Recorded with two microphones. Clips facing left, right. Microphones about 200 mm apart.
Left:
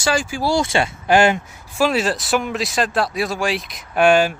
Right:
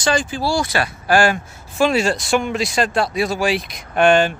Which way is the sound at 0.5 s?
25° left (ahead or behind).